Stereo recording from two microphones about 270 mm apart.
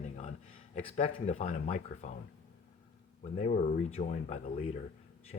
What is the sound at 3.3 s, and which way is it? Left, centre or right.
Speech, left.